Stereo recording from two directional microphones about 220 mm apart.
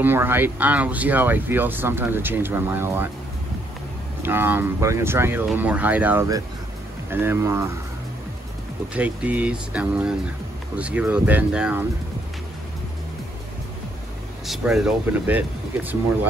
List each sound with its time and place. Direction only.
0.0 s speech: 10° right (ahead or behind)
4.2 s speech: 10° right (ahead or behind)
8.9 s speech: 5° right (ahead or behind)
14.4 s speech: centre (ahead or behind)